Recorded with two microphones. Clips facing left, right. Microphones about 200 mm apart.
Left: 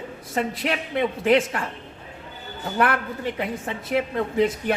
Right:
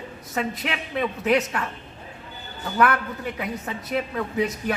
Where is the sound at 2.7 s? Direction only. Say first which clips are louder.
Right 1 dB; 30° left (ahead or behind).